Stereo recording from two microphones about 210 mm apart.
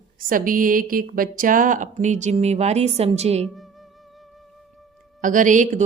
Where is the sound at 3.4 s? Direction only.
Centre (ahead or behind).